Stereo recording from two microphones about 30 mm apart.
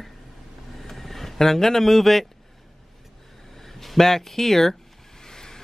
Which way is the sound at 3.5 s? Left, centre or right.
Centre.